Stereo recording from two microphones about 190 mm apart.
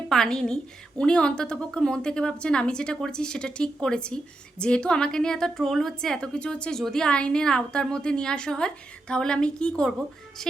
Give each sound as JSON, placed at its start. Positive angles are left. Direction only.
{"t": 0.1, "sound": "a woman's voice", "side_deg": 5}